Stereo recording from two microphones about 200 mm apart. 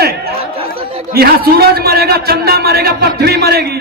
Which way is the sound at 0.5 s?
30° right (ahead or behind).